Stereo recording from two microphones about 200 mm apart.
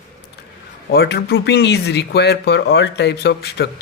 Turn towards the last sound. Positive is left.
turn(degrees=55)  # may be behind; listen again after turning